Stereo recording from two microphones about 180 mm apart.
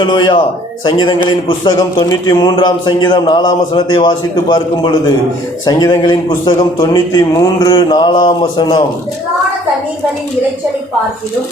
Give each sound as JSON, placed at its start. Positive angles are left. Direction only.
{"t": 0.0, "sound": "a man's voice", "side_deg": 25}